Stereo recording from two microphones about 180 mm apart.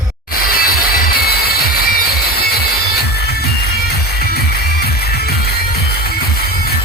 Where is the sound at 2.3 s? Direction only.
60° left (ahead or behind).